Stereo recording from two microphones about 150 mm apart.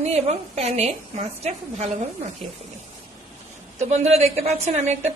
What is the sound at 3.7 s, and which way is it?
A woman's voice, 45° right (ahead or behind).